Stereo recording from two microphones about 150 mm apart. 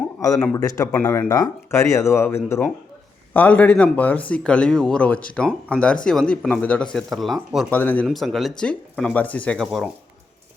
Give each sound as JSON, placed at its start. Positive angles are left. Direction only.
{"t": 0.2, "sound": "speech", "side_deg": 20}
{"t": 0.9, "sound": "speech", "side_deg": 10}
{"t": 1.3, "sound": "speech", "side_deg": 25}
{"t": 7.7, "sound": "speech", "side_deg": 10}
{"t": 8.0, "sound": "speech", "side_deg": 0}